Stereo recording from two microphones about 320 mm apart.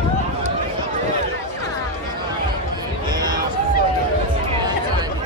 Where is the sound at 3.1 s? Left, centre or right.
Centre.